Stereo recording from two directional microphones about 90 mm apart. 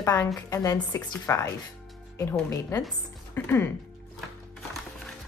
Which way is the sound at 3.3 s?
25° left (ahead or behind).